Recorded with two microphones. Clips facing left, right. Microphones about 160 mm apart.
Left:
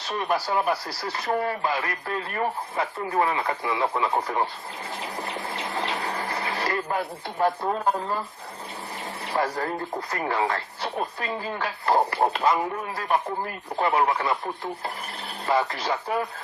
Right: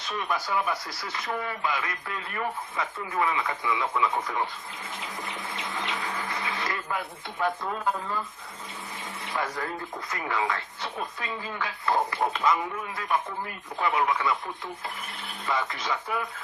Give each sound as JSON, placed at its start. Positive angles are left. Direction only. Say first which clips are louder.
{"t": 0.0, "sound": "speech", "louder": "left 4 dB", "side_deg": 35}
{"t": 5.2, "sound": "a sound", "louder": "left 4 dB", "side_deg": 35}
{"t": 9.3, "sound": "speech", "louder": "left 5 dB", "side_deg": 35}